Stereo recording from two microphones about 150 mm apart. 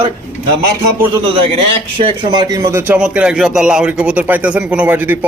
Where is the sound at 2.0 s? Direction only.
35° right (ahead or behind).